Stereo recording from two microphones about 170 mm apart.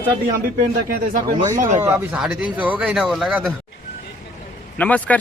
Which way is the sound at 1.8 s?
10° right (ahead or behind).